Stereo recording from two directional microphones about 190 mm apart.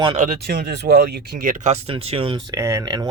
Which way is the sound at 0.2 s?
50° right (ahead or behind).